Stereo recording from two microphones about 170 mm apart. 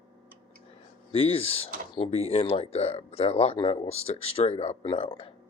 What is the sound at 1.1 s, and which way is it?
Speech, 35° left (ahead or behind).